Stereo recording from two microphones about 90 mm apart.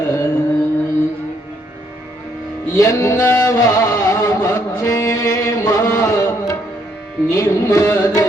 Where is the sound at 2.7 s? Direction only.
40° left (ahead or behind).